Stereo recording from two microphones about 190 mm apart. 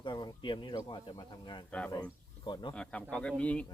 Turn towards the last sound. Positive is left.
turn(degrees=5)  # may be behind; listen again after turning